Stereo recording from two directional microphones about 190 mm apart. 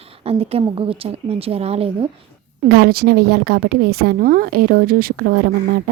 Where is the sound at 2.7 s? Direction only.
55° right (ahead or behind).